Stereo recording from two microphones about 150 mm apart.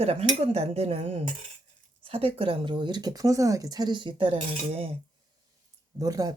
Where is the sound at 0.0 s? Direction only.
40° right (ahead or behind).